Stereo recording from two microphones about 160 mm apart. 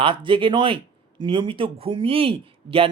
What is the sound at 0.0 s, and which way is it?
Speech, 35° right (ahead or behind).